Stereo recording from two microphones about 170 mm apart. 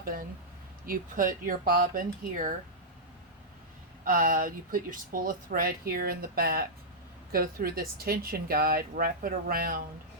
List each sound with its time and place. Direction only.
0.0 s speech: 55° right (ahead or behind)
4.0 s speech: 55° right (ahead or behind)